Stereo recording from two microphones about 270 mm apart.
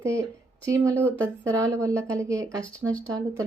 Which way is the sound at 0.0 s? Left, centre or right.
Centre.